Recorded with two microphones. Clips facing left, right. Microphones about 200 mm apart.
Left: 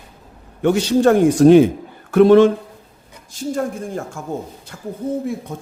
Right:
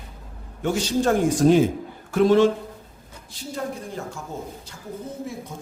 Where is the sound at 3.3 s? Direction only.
50° left (ahead or behind).